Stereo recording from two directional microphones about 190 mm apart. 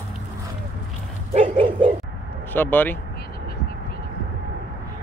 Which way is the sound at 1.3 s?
35° right (ahead or behind).